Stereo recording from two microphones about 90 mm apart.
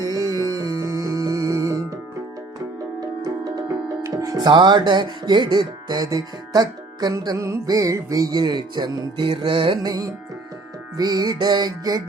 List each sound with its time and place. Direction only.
0.0 s music: 40° right (ahead or behind)
3.2 s music: 45° right (ahead or behind)
4.4 s speech: 55° right (ahead or behind)
9.1 s music: 65° right (ahead or behind)
9.8 s speech: 45° right (ahead or behind)